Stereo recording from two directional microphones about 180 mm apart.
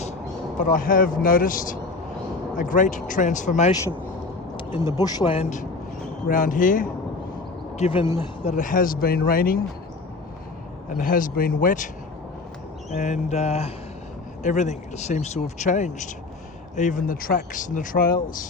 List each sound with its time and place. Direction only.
0.6 s speech: 50° left (ahead or behind)
4.9 s speech: 20° left (ahead or behind); by 6.8 s 45° left (ahead or behind)
7.8 s speech: 30° left (ahead or behind)
8.4 s speech: 45° left (ahead or behind)
10.9 s speech: 50° left (ahead or behind)
12.9 s speech: 40° left (ahead or behind)